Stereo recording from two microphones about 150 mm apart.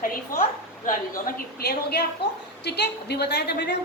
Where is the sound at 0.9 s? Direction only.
65° left (ahead or behind).